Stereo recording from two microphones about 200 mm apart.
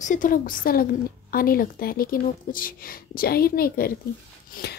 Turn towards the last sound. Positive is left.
turn(degrees=45)  # may be behind; listen again after turning